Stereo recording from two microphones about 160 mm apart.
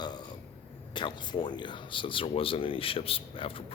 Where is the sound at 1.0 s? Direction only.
30° left (ahead or behind).